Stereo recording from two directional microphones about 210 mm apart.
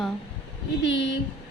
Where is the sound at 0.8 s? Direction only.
55° left (ahead or behind).